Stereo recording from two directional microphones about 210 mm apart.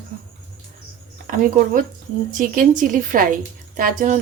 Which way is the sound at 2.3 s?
40° right (ahead or behind).